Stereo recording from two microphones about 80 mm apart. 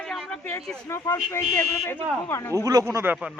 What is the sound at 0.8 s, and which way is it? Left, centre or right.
Speech, left.